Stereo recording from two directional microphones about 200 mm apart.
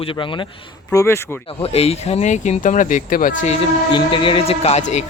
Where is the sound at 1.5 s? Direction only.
30° left (ahead or behind).